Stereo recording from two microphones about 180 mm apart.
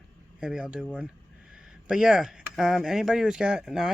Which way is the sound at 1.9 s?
5° right (ahead or behind).